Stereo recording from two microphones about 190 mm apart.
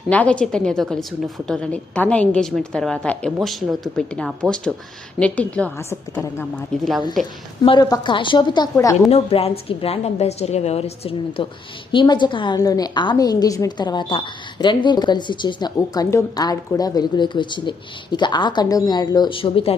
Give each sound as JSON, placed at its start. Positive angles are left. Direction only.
{"t": 0.1, "sound": "a woman's voice", "side_deg": 5}
{"t": 7.6, "sound": "a woman's voice", "side_deg": 25}
{"t": 9.0, "sound": "a woman's voice", "side_deg": 30}